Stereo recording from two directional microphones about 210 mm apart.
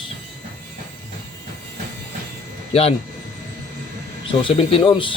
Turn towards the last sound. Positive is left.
turn(degrees=25)  # may be behind; listen again after turning